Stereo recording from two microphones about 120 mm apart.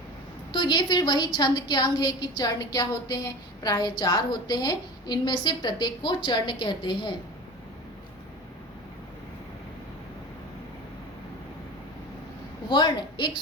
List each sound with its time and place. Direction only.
0.5 s a woman's voice: 40° left (ahead or behind)
12.6 s a woman's voice: 35° left (ahead or behind)